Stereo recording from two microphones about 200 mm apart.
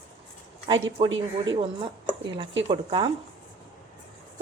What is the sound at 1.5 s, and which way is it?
A woman's voice, 25° right (ahead or behind).